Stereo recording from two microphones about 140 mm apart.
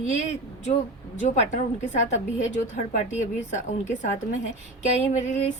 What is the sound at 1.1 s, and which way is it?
A woman's voice, 55° left (ahead or behind).